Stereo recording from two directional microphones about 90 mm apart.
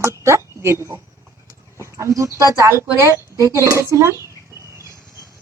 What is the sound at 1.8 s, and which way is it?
Speech, 35° right (ahead or behind).